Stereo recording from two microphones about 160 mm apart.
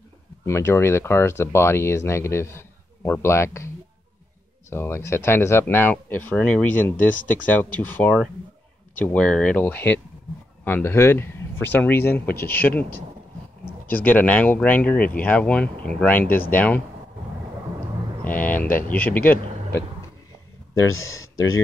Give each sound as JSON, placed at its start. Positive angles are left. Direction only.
{"t": 0.5, "sound": "speech", "side_deg": 15}
{"t": 18.2, "sound": "speech", "side_deg": 10}